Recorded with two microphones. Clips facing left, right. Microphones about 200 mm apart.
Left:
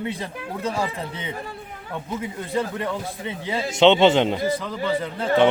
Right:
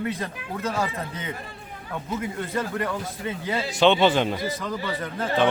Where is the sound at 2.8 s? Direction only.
20° left (ahead or behind).